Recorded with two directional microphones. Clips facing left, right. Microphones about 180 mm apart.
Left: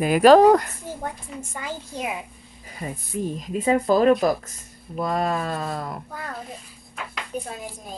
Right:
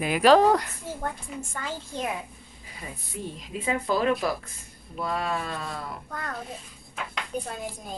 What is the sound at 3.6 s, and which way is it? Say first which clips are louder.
Speech: left 7 dB; 40° left (ahead or behind).